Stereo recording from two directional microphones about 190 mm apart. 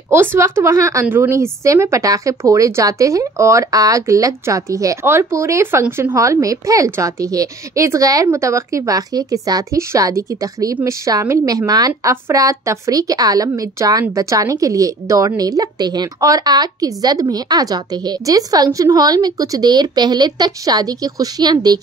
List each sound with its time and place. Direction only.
0.1 s a woman's voice: 10° right (ahead or behind)